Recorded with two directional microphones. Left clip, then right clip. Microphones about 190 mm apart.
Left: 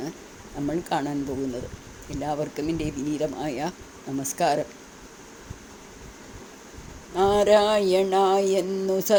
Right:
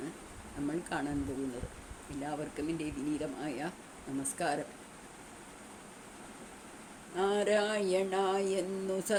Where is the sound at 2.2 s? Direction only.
30° left (ahead or behind).